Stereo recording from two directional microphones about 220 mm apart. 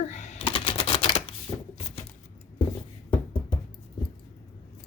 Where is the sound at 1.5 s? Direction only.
25° left (ahead or behind).